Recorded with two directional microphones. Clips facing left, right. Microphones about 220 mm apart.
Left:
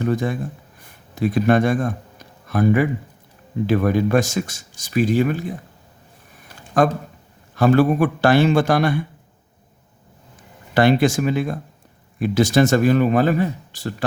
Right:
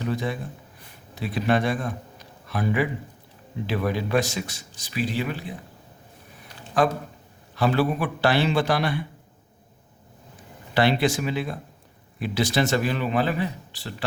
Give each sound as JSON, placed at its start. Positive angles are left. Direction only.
{"t": 0.0, "sound": "a man's voice", "side_deg": 50}
{"t": 6.8, "sound": "speech", "side_deg": 45}
{"t": 10.8, "sound": "speech", "side_deg": 45}